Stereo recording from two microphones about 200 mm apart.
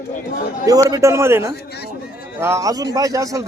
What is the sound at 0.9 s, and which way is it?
Speech, 15° right (ahead or behind).